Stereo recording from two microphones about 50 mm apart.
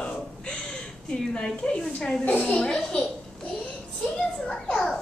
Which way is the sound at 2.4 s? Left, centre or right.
Centre.